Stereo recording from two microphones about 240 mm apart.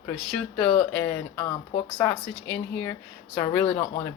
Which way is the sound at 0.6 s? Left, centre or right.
Left.